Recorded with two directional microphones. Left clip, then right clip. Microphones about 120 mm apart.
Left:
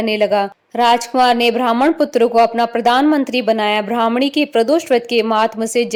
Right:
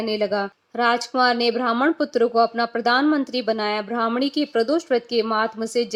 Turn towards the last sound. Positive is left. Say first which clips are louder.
# left 7 dB
turn(degrees=45)  # may be behind; listen again after turning